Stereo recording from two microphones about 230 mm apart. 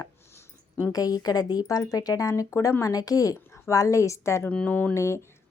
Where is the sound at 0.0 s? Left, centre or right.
Centre.